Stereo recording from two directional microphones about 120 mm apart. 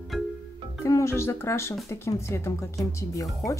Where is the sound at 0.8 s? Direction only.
25° left (ahead or behind).